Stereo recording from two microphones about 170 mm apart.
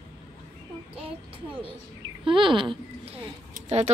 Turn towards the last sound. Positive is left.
turn(degrees=-40)  # may be behind; listen again after turning